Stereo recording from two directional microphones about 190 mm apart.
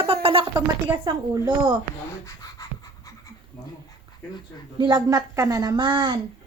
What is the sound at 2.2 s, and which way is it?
Pant, 15° left (ahead or behind).